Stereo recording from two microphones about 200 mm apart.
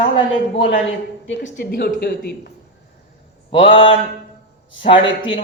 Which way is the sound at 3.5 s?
25° left (ahead or behind).